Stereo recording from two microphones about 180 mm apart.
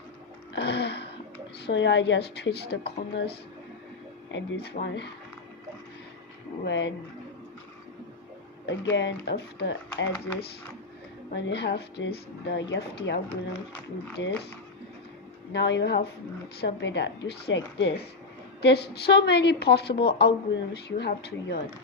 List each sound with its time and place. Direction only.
0.5 s a sound: 70° left (ahead or behind)
1.6 s speech: 85° left; by 3.3 s 65° left (ahead or behind)
4.3 s speech: 80° left
6.7 s speech: 80° left
8.6 s speech: 85° left
11.3 s speech: 75° left (ahead or behind)
14.2 s speech: 75° left (ahead or behind)
15.5 s speech: 75° left (ahead or behind)
18.6 s speech: 65° left (ahead or behind)